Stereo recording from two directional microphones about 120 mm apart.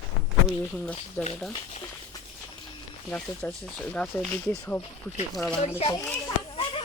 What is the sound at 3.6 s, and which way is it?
Speech, 5° left (ahead or behind).